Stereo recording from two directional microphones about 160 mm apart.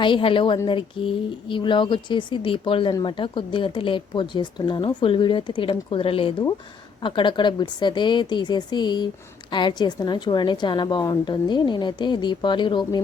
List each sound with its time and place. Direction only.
0.0 s a woman's voice: 30° left (ahead or behind)